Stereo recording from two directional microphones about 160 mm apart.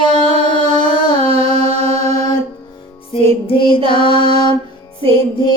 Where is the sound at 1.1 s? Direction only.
40° right (ahead or behind).